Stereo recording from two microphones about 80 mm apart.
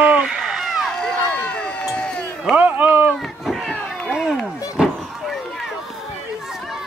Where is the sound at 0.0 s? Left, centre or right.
Centre.